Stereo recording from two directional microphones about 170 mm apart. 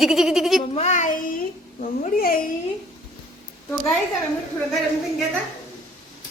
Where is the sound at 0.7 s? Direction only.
45° left (ahead or behind); by 2.4 s 60° left (ahead or behind).